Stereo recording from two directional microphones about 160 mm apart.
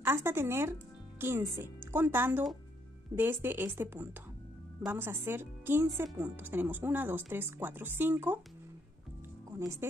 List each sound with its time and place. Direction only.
0.0 s speech: 15° right (ahead or behind)
9.6 s speech: 20° right (ahead or behind)